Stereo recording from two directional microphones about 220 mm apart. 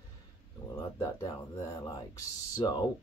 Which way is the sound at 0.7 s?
15° left (ahead or behind).